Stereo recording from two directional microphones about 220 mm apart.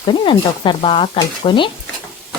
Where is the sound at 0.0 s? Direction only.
20° left (ahead or behind).